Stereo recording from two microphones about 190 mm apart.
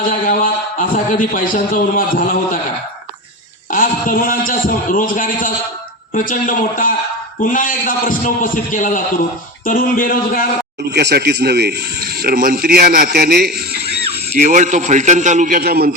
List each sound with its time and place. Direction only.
0.1 s a man's voice: 45° left (ahead or behind)
3.7 s a man's voice: 45° left (ahead or behind)
10.9 s a man's voice: 60° right (ahead or behind)
14.3 s a man's voice: 40° right (ahead or behind)